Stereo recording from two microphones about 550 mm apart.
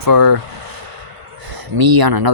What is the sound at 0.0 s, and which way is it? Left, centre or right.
Speech, right.